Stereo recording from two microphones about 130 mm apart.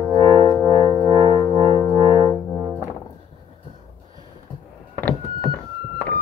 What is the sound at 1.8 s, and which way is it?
French horn, 25° left (ahead or behind).